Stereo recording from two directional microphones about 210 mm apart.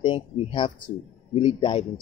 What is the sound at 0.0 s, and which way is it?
Speech, 25° left (ahead or behind).